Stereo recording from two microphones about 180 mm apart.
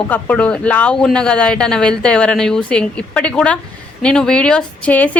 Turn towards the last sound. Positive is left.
turn(degrees=5)  # may be behind; listen again after turning